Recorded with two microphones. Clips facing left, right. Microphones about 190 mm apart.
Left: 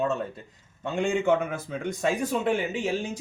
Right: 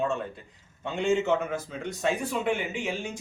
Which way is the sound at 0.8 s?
45° left (ahead or behind).